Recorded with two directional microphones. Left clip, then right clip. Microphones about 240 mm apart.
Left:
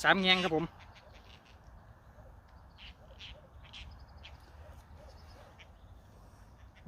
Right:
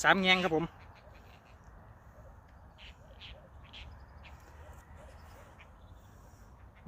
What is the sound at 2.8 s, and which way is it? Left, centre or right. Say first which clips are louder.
Quack: left 1 dB; left.